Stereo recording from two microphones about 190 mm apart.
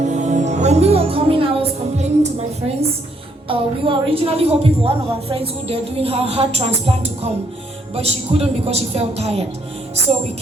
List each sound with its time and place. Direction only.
0.0 s music: 40° right (ahead or behind)
3.5 s speech: 30° right (ahead or behind)
7.9 s speech: 30° right (ahead or behind)